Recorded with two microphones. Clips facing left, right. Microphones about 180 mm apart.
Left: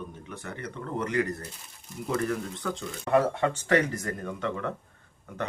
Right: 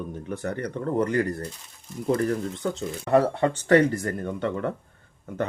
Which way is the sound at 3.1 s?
35° right (ahead or behind).